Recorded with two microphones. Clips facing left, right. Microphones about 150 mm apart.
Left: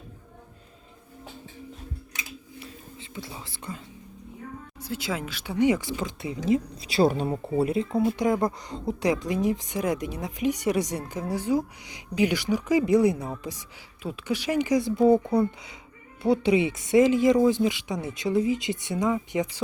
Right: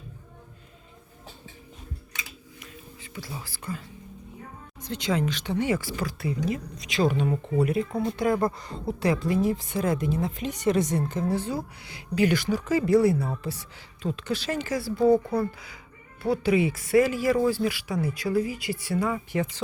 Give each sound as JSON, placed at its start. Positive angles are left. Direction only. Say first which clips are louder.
{"t": 2.6, "sound": "whispering", "louder": "left 3 dB", "side_deg": 25}
{"t": 4.8, "sound": "speech", "louder": "right 4 dB", "side_deg": 5}
{"t": 7.5, "sound": "speech", "louder": "left 2 dB", "side_deg": 25}
{"t": 16.3, "sound": "speech", "louder": "left 1 dB", "side_deg": 20}